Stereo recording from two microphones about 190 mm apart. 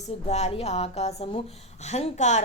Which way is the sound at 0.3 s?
35° left (ahead or behind).